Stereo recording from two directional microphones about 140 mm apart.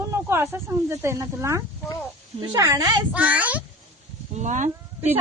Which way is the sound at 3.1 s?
10° right (ahead or behind).